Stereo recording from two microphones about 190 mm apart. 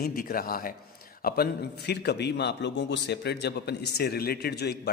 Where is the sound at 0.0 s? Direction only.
50° left (ahead or behind).